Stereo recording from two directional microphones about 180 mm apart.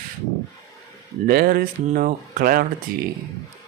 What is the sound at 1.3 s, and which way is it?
Speech, 55° right (ahead or behind).